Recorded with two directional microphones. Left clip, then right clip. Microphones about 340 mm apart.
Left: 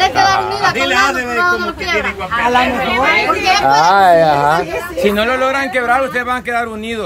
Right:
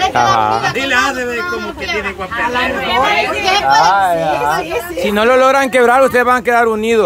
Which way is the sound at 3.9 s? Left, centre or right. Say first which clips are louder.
Left 4 dB; left.